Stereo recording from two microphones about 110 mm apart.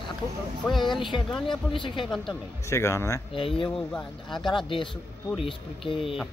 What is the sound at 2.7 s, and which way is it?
Speech, 25° left (ahead or behind).